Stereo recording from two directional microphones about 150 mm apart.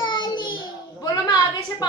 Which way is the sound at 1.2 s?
25° left (ahead or behind).